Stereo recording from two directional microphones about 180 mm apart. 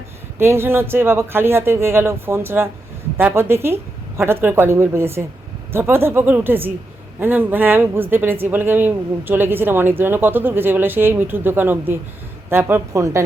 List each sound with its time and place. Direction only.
0.3 s speech: 15° right (ahead or behind)